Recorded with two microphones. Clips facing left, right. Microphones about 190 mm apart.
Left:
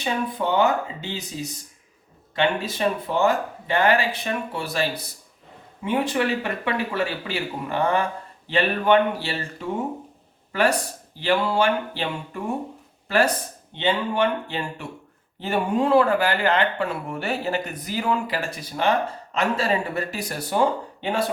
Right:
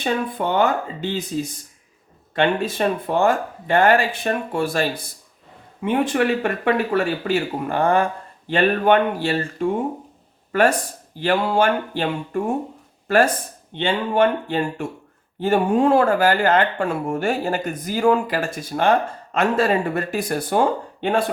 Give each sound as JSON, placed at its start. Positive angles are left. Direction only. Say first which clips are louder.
{"t": 0.0, "sound": "speech", "louder": "right 3 dB", "side_deg": -55}